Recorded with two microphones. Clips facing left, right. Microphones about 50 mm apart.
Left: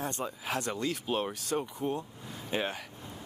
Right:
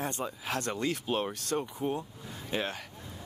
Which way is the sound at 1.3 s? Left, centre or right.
Centre.